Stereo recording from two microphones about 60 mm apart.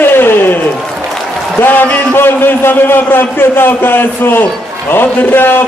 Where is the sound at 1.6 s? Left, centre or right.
Left.